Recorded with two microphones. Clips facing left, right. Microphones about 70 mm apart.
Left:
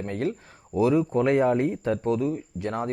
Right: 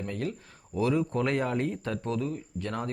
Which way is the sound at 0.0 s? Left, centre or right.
Left.